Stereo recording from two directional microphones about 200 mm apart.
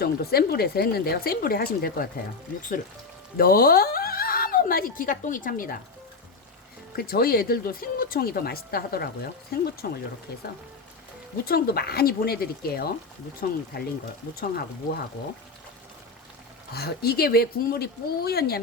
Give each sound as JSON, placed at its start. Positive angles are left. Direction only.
{"t": 0.0, "sound": "speech", "side_deg": 50}
{"t": 3.3, "sound": "speech", "side_deg": 45}
{"t": 6.9, "sound": "speech", "side_deg": 50}
{"t": 11.4, "sound": "speech", "side_deg": 50}
{"t": 16.7, "sound": "speech", "side_deg": 50}